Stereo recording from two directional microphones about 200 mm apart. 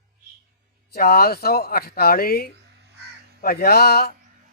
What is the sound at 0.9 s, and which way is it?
Speech, 50° left (ahead or behind).